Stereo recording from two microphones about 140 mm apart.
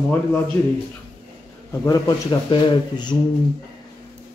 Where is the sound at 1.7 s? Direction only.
30° left (ahead or behind).